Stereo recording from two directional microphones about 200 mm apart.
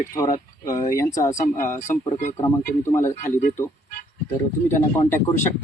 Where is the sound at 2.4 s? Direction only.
15° left (ahead or behind).